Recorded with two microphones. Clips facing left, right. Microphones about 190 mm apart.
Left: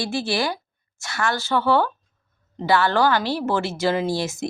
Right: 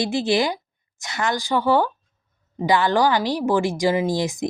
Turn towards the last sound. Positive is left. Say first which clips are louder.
# right 2 dB
turn(degrees=-15)  # may be behind; listen again after turning